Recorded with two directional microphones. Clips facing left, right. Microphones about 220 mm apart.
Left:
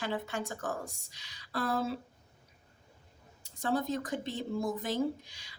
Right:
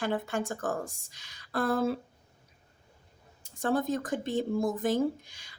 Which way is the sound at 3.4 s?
50° right (ahead or behind).